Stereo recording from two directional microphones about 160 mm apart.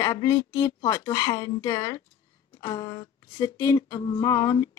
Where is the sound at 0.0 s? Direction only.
20° left (ahead or behind).